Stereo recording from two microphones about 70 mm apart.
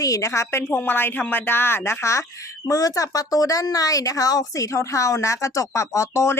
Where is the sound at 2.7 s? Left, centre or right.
Left.